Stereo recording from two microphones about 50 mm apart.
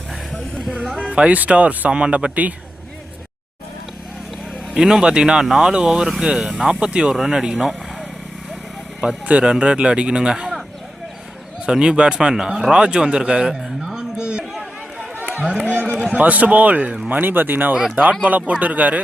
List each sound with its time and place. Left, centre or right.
0.9 s speech: right
4.7 s speech: centre
9.0 s speech: right
11.6 s speech: centre
13.9 s a sound: centre
15.2 s run: right
15.6 s a sound: right
16.1 s speech: right
17.1 s speech: right